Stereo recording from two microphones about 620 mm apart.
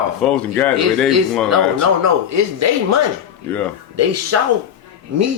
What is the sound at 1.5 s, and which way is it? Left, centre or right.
Speech, right.